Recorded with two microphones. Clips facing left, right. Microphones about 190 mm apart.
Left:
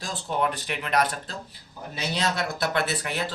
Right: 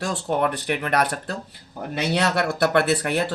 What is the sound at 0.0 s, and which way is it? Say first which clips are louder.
A man's voice: right 5 dB; 65° right (ahead or behind).